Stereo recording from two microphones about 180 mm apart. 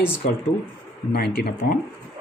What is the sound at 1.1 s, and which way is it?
Speech, 60° left (ahead or behind).